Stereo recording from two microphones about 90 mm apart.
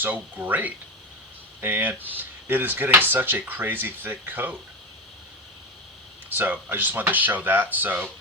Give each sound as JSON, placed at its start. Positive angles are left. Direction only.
{"t": 0.0, "sound": "speech", "side_deg": -20}
{"t": 6.3, "sound": "speech", "side_deg": -20}